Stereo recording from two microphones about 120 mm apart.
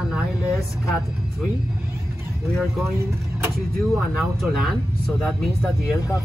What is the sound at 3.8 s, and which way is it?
Speech, centre (ahead or behind).